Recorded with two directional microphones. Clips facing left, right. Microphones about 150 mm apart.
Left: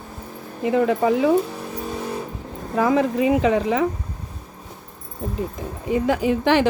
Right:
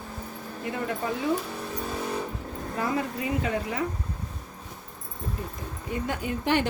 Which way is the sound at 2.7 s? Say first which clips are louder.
Left 11 dB; 90° left.